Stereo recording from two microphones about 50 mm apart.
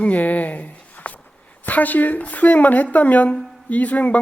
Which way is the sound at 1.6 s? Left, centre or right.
Left.